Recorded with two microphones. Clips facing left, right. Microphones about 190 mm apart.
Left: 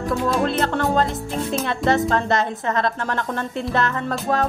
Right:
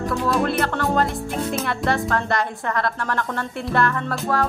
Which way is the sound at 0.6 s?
20° left (ahead or behind).